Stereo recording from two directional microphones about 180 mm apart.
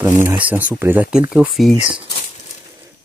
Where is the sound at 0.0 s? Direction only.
15° right (ahead or behind).